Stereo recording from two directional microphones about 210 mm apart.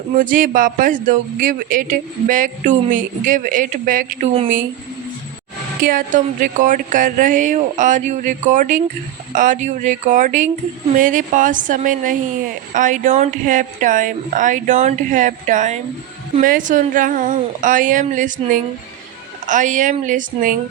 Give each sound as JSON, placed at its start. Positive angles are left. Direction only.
{"t": 0.1, "sound": "speech", "side_deg": -40}
{"t": 5.8, "sound": "speech", "side_deg": -40}